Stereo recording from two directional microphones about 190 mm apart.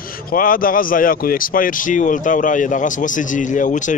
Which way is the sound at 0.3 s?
45° left (ahead or behind).